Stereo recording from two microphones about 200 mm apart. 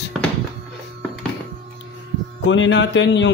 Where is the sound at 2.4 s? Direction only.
70° left (ahead or behind).